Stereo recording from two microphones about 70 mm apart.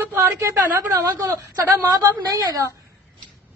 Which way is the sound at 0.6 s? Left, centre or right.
Right.